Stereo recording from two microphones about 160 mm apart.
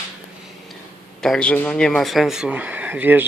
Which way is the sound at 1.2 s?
5° left (ahead or behind).